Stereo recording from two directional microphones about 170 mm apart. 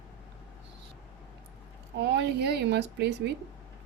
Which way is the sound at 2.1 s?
75° right (ahead or behind).